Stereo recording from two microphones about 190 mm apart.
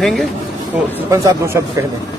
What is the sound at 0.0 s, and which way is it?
Speech, centre (ahead or behind).